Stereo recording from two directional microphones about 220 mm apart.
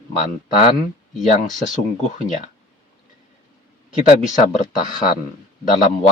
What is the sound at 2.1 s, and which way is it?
Speech, 35° left (ahead or behind).